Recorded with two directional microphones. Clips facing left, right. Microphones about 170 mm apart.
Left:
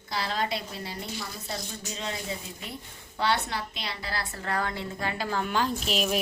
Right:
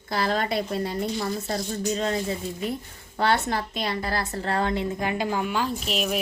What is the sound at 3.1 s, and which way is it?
A woman's voice, 45° right (ahead or behind).